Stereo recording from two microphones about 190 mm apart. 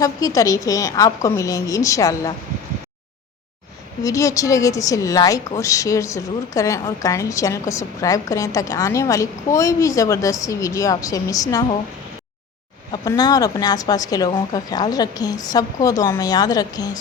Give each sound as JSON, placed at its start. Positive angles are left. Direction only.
{"t": 0.0, "sound": "a woman's voice", "side_deg": 20}
{"t": 4.0, "sound": "a woman's voice", "side_deg": 15}
{"t": 12.9, "sound": "a woman's voice", "side_deg": 20}